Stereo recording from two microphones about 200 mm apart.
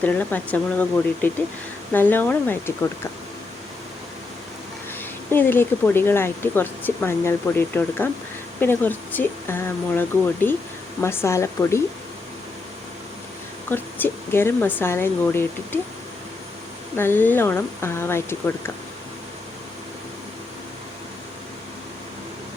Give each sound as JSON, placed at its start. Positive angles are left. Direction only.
{"t": 0.0, "sound": "speech", "side_deg": 10}
{"t": 5.3, "sound": "speech", "side_deg": 10}
{"t": 13.7, "sound": "speech", "side_deg": 10}
{"t": 17.0, "sound": "speech", "side_deg": 10}